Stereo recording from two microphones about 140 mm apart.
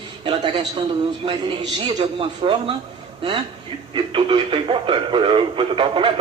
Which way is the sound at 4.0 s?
40° right (ahead or behind).